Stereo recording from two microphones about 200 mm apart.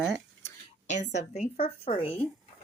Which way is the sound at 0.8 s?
35° left (ahead or behind).